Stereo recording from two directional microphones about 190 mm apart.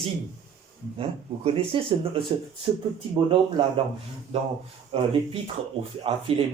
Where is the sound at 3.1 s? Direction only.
25° right (ahead or behind).